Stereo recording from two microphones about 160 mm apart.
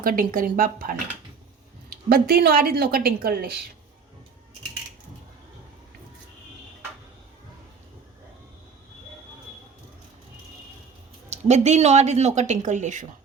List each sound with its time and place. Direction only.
0.0 s speech: 60° right (ahead or behind)
2.0 s speech: 75° right (ahead or behind)
11.3 s speech: 45° right (ahead or behind)